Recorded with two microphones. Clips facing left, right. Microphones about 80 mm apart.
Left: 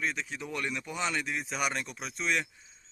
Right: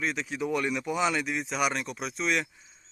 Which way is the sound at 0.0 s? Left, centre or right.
Centre.